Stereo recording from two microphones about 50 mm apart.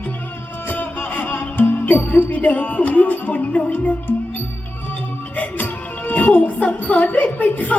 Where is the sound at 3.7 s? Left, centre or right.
Left.